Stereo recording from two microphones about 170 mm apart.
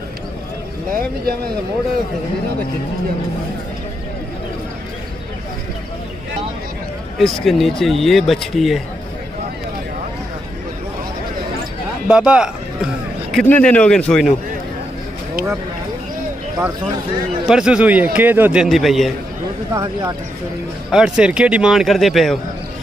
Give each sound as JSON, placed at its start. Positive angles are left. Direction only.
{"t": 0.9, "sound": "speech", "side_deg": -60}
{"t": 7.2, "sound": "a man's voice", "side_deg": 0}
{"t": 12.1, "sound": "a sound", "side_deg": -5}
{"t": 13.5, "sound": "a man's voice", "side_deg": 10}
{"t": 17.5, "sound": "a man's voice", "side_deg": -5}
{"t": 19.7, "sound": "speech", "side_deg": -20}
{"t": 20.9, "sound": "a man's voice", "side_deg": -5}